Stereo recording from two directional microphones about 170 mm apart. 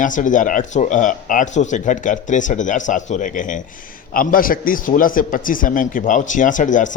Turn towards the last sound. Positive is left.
turn(degrees=50)  # may be behind; listen again after turning